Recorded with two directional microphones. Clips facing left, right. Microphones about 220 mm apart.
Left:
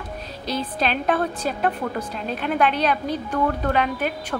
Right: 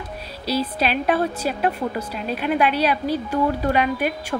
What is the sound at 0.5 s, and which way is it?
A woman's voice, 10° right (ahead or behind).